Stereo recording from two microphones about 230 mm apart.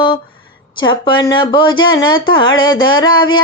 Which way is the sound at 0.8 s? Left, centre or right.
Centre.